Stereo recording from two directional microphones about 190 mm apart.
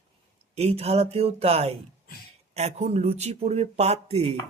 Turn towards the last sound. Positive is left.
turn(degrees=-35)  # may be behind; listen again after turning